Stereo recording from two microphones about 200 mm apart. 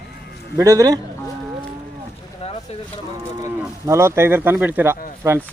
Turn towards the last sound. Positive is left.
turn(degrees=-15)  # may be behind; listen again after turning